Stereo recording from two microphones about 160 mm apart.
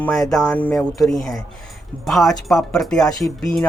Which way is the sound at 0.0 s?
Centre (ahead or behind).